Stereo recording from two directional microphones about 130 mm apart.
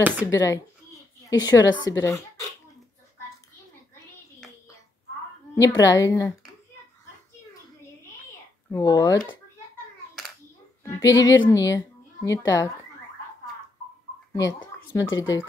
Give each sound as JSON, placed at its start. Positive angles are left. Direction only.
{"t": 0.3, "sound": "a woman's voice", "side_deg": 25}
{"t": 5.5, "sound": "a woman's voice", "side_deg": 25}
{"t": 8.6, "sound": "a woman's voice", "side_deg": 25}
{"t": 10.8, "sound": "a woman's voice", "side_deg": 25}
{"t": 15.0, "sound": "a woman's voice", "side_deg": 30}